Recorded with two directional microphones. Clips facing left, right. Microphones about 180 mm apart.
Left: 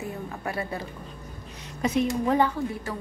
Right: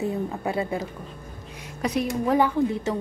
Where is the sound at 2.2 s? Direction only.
5° right (ahead or behind).